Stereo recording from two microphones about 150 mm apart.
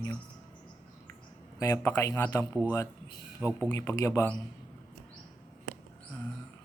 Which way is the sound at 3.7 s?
20° left (ahead or behind).